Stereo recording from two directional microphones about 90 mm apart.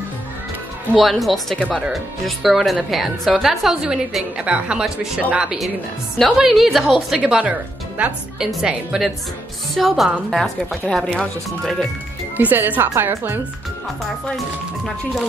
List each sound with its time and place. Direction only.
0.9 s a woman's voice: centre (ahead or behind)
12.4 s speech: 20° right (ahead or behind)